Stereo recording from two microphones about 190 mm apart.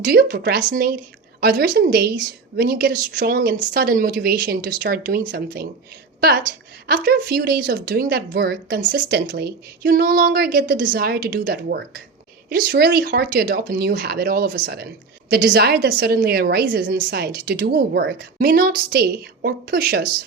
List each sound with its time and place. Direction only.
0.0 s a woman's voice: 50° right (ahead or behind)
8.8 s a woman's voice: 45° right (ahead or behind)